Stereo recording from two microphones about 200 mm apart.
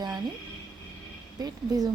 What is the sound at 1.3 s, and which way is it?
Speech, 20° right (ahead or behind).